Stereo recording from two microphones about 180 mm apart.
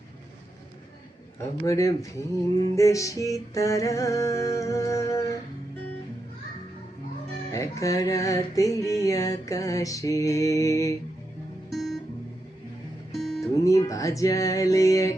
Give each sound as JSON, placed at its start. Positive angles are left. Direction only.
{"t": 1.4, "sound": "music", "side_deg": 15}
{"t": 7.5, "sound": "music", "side_deg": 15}
{"t": 11.7, "sound": "guitar", "side_deg": 0}
{"t": 13.1, "sound": "music", "side_deg": 0}
{"t": 13.7, "sound": "music", "side_deg": 20}